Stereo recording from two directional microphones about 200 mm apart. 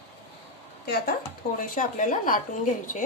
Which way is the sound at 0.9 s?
45° left (ahead or behind).